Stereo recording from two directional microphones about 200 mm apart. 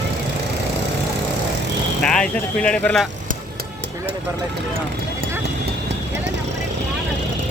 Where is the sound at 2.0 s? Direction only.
5° left (ahead or behind).